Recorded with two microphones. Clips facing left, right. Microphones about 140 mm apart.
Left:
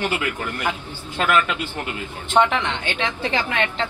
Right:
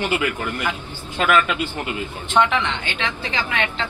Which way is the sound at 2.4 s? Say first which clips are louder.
Left 1 dB; 30° left (ahead or behind).